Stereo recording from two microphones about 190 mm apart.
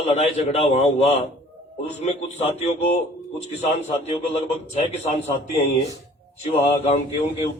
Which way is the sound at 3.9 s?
30° left (ahead or behind).